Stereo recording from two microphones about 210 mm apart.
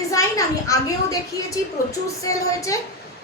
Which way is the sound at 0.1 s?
15° left (ahead or behind).